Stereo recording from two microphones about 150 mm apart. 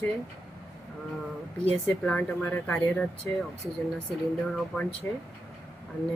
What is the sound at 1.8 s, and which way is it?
Speech, 5° left (ahead or behind).